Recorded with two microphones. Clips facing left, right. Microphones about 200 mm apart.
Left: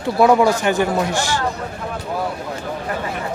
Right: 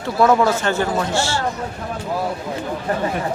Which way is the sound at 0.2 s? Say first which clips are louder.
Left 2 dB; 15° left (ahead or behind).